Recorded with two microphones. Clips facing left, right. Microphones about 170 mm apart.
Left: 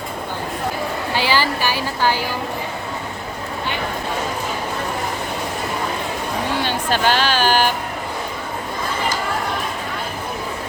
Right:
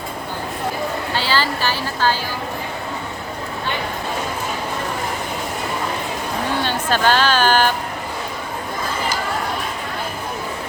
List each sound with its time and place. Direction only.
1.1 s speech: 15° left (ahead or behind)
6.9 s speech: 45° right (ahead or behind)
7.4 s speech: 10° left (ahead or behind)